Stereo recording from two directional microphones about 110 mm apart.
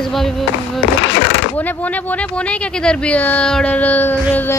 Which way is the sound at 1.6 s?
15° left (ahead or behind).